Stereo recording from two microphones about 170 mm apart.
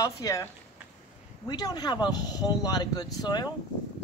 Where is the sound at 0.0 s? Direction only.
20° left (ahead or behind).